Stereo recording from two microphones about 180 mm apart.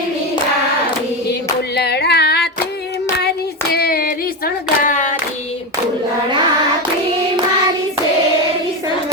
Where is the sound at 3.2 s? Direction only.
60° left (ahead or behind); by 5.1 s 45° left (ahead or behind).